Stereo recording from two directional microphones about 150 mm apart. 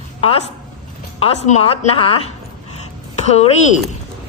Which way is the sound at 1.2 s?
45° left (ahead or behind).